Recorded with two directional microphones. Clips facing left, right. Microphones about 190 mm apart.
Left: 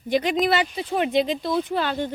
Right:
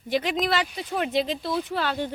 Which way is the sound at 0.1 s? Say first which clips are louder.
Left 4 dB; centre (ahead or behind).